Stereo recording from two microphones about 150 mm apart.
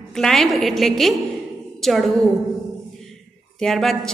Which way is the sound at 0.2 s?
Centre (ahead or behind).